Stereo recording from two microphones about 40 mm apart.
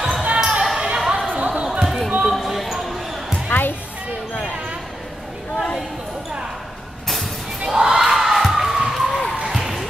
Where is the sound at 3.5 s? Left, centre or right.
Left.